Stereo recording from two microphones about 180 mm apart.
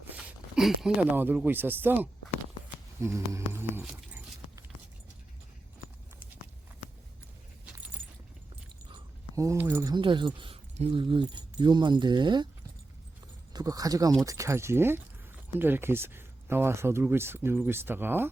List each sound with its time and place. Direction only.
0.3 s speech: centre (ahead or behind)
3.8 s keys jangling: 10° right (ahead or behind)
9.3 s speech: 15° right (ahead or behind)
13.5 s speech: 20° right (ahead or behind)